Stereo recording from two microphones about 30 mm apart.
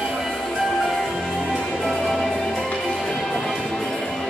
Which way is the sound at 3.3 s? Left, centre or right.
Centre.